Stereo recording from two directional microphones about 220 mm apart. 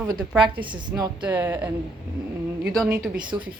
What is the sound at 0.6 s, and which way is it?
A woman's voice, 20° right (ahead or behind).